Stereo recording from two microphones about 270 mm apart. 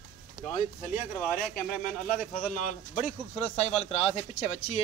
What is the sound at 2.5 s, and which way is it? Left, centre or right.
A man's voice, left.